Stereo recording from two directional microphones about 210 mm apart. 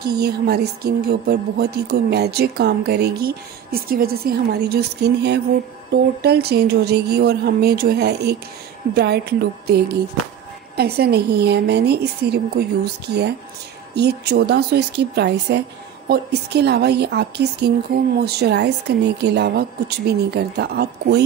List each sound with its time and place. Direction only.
0.0 s speech: 50° right (ahead or behind)